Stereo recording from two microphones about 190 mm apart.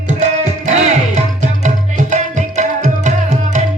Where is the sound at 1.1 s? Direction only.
40° right (ahead or behind).